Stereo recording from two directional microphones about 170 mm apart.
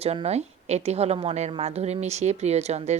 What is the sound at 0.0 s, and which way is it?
A woman's voice, 35° right (ahead or behind).